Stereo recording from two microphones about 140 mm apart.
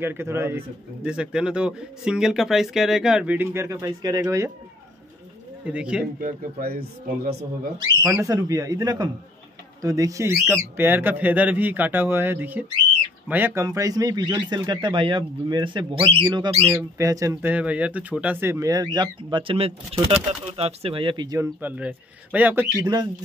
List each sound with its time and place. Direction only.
0.0 s speech: 15° right (ahead or behind)
1.0 s speech: 5° right (ahead or behind); by 4.5 s 25° right (ahead or behind)
5.7 s speech: 5° right (ahead or behind)
6.2 s speech: 90° right
8.1 s a man's voice: 25° right (ahead or behind)
13.7 s speech: 25° right (ahead or behind)
18.9 s speech: 35° right (ahead or behind)
21.4 s speech: 10° right (ahead or behind)